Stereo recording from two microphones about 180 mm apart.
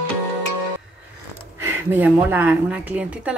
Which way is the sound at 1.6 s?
10° right (ahead or behind).